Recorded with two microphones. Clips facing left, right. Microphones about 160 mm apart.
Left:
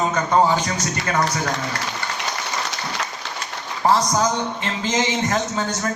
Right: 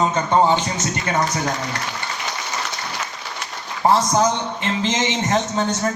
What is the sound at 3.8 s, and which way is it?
A man's voice, 20° right (ahead or behind).